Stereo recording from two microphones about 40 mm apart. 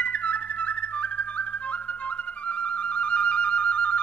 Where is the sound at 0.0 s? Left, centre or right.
Left.